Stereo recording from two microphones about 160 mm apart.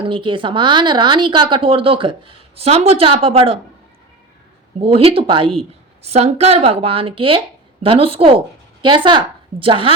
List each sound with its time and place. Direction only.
0.0 s a woman's voice: 30° right (ahead or behind)
4.8 s a woman's voice: 35° right (ahead or behind)